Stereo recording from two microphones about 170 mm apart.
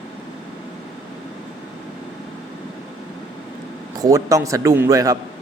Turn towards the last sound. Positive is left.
turn(degrees=-20)  # may be behind; listen again after turning